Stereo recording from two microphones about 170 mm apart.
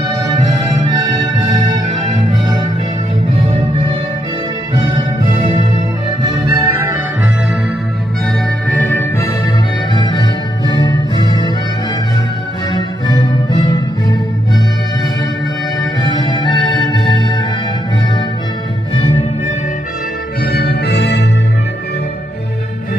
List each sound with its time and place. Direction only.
1.0 s music: 20° right (ahead or behind)
6.5 s music: 20° right (ahead or behind)
8.6 s music: 10° left (ahead or behind)
9.9 s music: 25° left (ahead or behind)
12.7 s music: 25° left (ahead or behind)
16.0 s music: 25° left (ahead or behind)
20.5 s organ: 70° left (ahead or behind)